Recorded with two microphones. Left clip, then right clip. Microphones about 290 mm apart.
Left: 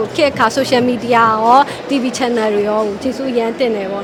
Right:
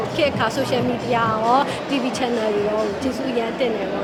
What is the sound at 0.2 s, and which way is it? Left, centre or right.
Speech, left.